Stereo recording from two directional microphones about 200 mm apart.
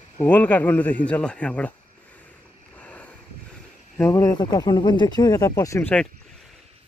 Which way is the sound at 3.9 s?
15° left (ahead or behind).